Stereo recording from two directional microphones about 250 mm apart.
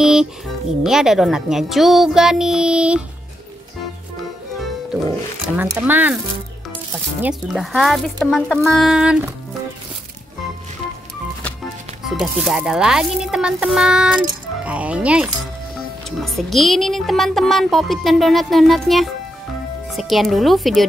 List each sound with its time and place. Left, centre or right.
0.0 s music: centre
0.8 s speech: centre
5.6 s speech: centre
7.2 s speech: centre
12.0 s speech: centre